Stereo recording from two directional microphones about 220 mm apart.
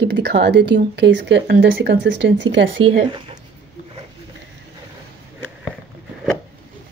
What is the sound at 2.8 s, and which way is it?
Speech, 25° right (ahead or behind).